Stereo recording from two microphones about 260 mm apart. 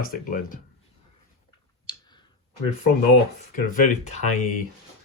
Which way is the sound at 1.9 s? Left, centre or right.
Centre.